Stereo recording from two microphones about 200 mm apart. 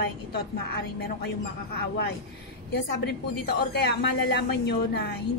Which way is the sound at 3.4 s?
55° left (ahead or behind).